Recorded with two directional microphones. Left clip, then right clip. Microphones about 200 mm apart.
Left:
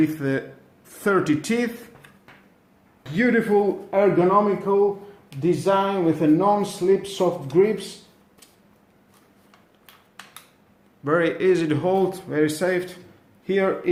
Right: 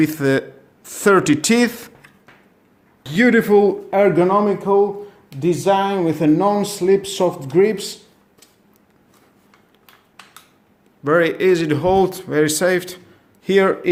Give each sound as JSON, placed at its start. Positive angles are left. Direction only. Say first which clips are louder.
{"t": 0.0, "sound": "speech", "louder": "right 6 dB", "side_deg": -45}
{"t": 3.0, "sound": "speech", "louder": "right 6 dB", "side_deg": -50}
{"t": 11.0, "sound": "a man's voice", "louder": "right 5 dB", "side_deg": -35}